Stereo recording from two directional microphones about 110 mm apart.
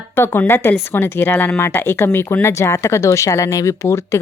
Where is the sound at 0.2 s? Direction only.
20° left (ahead or behind).